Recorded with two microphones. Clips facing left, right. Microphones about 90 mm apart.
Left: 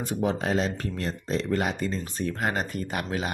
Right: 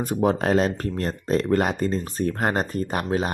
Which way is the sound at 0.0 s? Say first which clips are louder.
Right 5 dB; 45° right (ahead or behind).